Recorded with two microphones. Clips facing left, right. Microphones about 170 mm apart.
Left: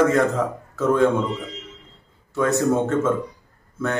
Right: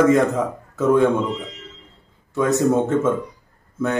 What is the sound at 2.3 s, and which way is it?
Speech, 15° right (ahead or behind).